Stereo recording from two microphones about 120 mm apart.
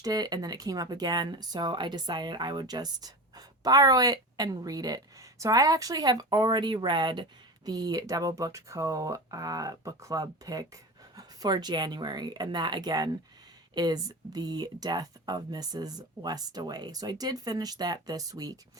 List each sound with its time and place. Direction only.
0.0 s speech: 30° right (ahead or behind)